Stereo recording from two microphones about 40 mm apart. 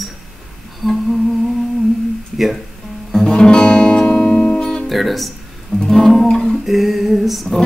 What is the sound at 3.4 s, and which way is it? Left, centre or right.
Music, left.